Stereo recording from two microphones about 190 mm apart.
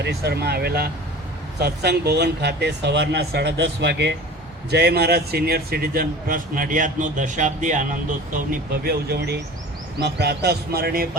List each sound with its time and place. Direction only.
0.0 s a man's voice: 60° right (ahead or behind)